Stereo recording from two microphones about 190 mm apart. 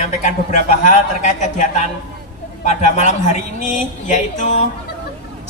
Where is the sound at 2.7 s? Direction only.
40° left (ahead or behind).